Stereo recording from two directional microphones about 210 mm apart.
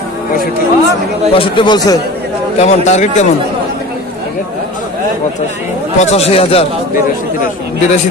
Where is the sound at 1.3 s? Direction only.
25° left (ahead or behind).